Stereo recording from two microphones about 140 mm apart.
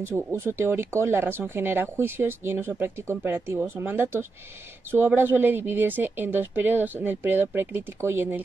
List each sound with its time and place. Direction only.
0.3 s speech: 20° right (ahead or behind)